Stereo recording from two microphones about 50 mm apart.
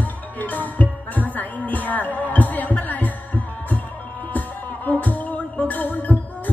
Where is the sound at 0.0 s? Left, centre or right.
Left.